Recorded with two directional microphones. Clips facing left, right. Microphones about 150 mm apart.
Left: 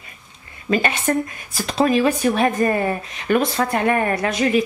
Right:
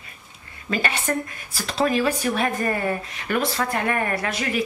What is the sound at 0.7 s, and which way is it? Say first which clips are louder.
Speech: left 5 dB; 20° left (ahead or behind).